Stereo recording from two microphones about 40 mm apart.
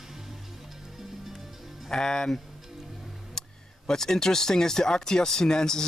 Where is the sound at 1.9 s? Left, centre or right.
Centre.